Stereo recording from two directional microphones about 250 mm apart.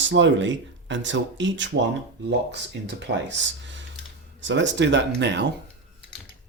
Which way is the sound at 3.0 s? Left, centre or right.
Right.